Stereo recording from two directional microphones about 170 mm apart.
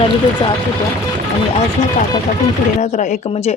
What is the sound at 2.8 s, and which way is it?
Speech, 45° left (ahead or behind).